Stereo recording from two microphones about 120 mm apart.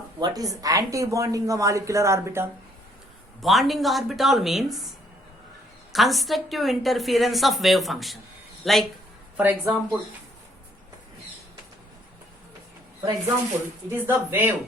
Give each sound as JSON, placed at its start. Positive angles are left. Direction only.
{"t": 0.2, "sound": "speech", "side_deg": -30}
{"t": 3.4, "sound": "a woman's voice", "side_deg": 0}
{"t": 5.9, "sound": "a woman's voice", "side_deg": 0}
{"t": 9.4, "sound": "speech", "side_deg": -15}
{"t": 13.0, "sound": "speech", "side_deg": -35}
{"t": 14.0, "sound": "speech", "side_deg": -20}